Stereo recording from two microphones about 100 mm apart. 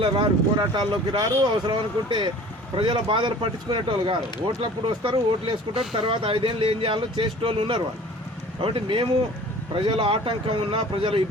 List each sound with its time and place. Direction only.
0.0 s speech: 50° right (ahead or behind)